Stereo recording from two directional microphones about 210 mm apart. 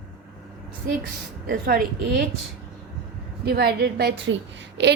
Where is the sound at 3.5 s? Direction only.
50° right (ahead or behind).